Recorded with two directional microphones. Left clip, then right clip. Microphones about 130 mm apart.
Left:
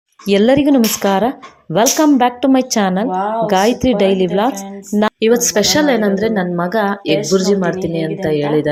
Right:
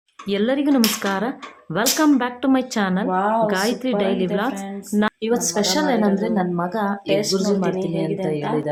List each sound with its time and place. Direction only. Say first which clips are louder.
0.3 s speech: left 8 dB; 40° left (ahead or behind)
3.1 s a woman's voice: left 2 dB; centre (ahead or behind)
3.4 s a woman's voice: left 7 dB; 30° left (ahead or behind)